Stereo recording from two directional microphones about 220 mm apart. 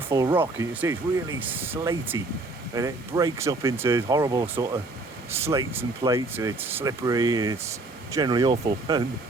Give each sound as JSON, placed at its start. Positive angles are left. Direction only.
{"t": 0.1, "sound": "speech", "side_deg": -15}